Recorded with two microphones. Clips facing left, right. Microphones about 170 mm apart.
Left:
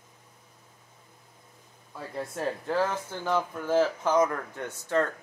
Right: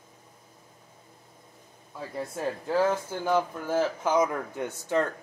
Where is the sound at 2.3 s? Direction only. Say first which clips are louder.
Right 1 dB; 5° right (ahead or behind).